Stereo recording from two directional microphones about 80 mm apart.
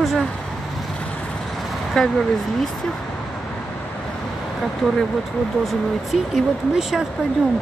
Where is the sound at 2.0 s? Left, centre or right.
Centre.